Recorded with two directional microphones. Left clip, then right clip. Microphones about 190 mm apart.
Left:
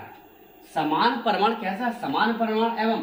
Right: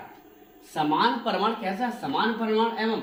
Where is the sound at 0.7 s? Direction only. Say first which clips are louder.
Left 1 dB; 15° left (ahead or behind).